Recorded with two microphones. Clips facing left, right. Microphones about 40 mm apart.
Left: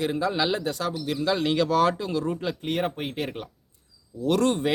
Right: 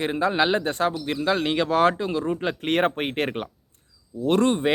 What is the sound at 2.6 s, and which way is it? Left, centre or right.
Speech, right.